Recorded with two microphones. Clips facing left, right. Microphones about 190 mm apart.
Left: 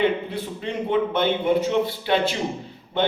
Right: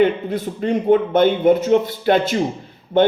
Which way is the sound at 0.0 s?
45° right (ahead or behind).